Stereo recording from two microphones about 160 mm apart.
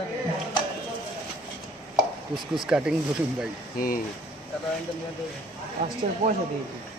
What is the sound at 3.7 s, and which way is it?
Speech, 65° left (ahead or behind).